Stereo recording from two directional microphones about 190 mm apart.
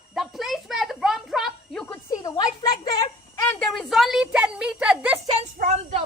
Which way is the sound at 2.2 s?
20° left (ahead or behind).